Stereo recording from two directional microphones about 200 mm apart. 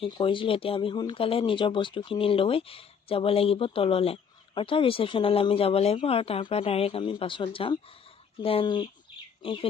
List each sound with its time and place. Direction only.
0.0 s speech: 25° left (ahead or behind)